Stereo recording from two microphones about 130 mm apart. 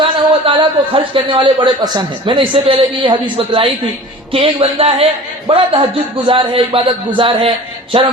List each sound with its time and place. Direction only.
0.0 s a man's voice: 45° right (ahead or behind)